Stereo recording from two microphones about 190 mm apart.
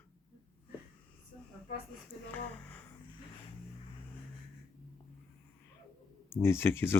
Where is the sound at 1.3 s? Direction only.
35° left (ahead or behind).